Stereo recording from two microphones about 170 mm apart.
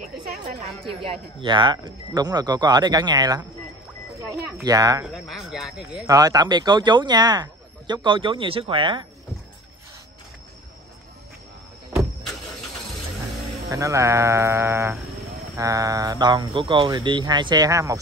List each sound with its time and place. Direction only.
1.4 s speech: 30° right (ahead or behind)
4.6 s speech: 20° right (ahead or behind)
5.0 s speech: centre (ahead or behind)
6.0 s speech: 20° right (ahead or behind)
13.7 s speech: 20° right (ahead or behind)